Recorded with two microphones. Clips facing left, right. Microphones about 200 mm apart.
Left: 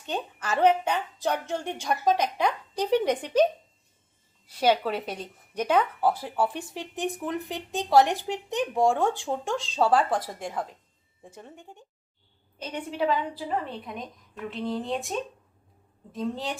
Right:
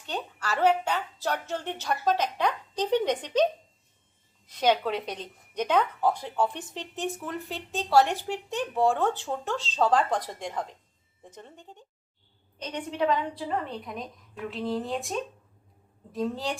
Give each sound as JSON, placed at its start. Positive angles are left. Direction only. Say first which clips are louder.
{"t": 0.0, "sound": "speech", "louder": "left 2 dB", "side_deg": 20}
{"t": 4.4, "sound": "a woman's voice", "louder": "left 1 dB", "side_deg": 10}